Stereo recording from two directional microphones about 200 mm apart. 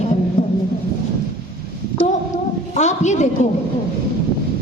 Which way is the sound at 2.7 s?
35° left (ahead or behind).